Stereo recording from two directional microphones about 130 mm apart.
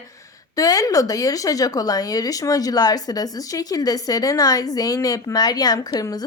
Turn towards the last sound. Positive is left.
turn(degrees=30)  # may be behind; listen again after turning